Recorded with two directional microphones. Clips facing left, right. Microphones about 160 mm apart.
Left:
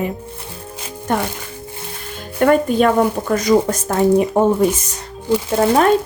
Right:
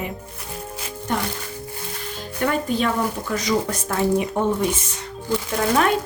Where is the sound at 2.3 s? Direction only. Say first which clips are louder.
Left 8 dB; 55° left (ahead or behind).